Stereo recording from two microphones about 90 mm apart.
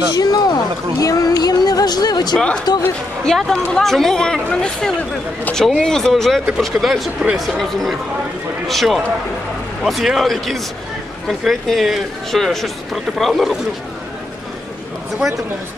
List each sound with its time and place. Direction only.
0.1 s speech: 45° left (ahead or behind)
2.3 s speech: 10° left (ahead or behind)